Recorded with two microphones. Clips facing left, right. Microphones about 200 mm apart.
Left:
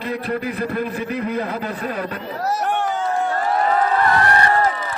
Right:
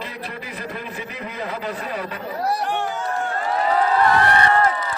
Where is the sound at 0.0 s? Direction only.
55° left (ahead or behind).